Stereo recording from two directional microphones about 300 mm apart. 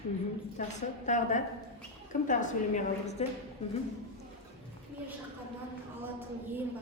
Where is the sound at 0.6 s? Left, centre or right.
Left.